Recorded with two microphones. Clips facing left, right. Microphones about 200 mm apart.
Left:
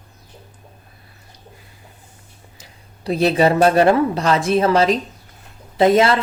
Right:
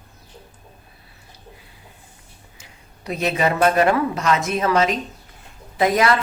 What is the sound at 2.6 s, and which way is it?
A woman's voice, 35° left (ahead or behind).